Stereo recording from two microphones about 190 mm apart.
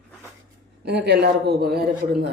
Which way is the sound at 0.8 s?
60° right (ahead or behind).